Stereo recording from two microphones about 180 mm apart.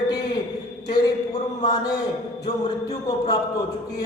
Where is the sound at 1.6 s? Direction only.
25° left (ahead or behind).